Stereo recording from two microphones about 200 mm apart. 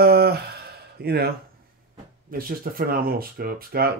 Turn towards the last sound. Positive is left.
turn(degrees=-50)  # may be behind; listen again after turning